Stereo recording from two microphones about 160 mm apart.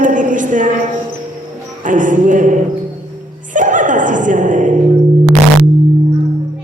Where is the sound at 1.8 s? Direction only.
55° right (ahead or behind).